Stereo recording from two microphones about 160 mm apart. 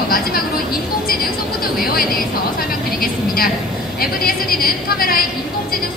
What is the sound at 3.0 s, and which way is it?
A woman's voice, 65° left (ahead or behind).